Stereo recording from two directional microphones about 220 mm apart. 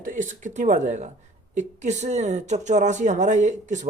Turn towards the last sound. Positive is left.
turn(degrees=-35)  # may be behind; listen again after turning